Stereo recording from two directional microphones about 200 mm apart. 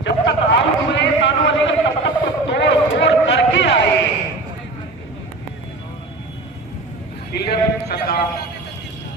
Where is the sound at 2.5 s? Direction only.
60° left (ahead or behind).